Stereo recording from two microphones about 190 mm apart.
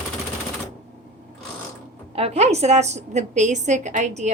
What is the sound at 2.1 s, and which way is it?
A woman's voice, 35° right (ahead or behind).